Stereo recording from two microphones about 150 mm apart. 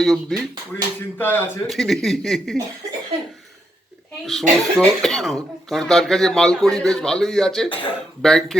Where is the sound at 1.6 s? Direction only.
Centre (ahead or behind).